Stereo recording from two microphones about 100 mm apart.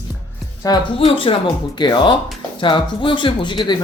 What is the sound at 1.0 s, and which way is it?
Speech, 65° left (ahead or behind).